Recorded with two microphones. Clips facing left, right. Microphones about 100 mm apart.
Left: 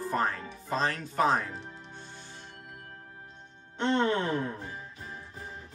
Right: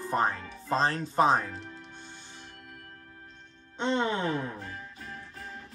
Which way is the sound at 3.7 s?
20° right (ahead or behind).